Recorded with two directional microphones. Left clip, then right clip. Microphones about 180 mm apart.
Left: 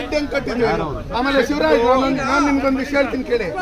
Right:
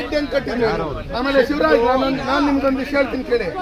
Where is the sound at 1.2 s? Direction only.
15° left (ahead or behind).